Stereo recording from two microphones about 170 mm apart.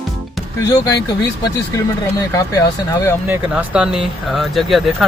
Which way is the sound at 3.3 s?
10° right (ahead or behind).